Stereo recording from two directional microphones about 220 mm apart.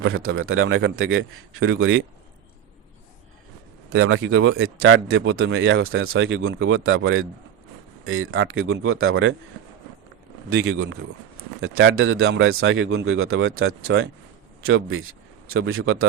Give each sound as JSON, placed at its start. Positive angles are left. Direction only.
{"t": 0.0, "sound": "speech", "side_deg": -65}
{"t": 4.0, "sound": "speech", "side_deg": -60}
{"t": 10.5, "sound": "speech", "side_deg": -65}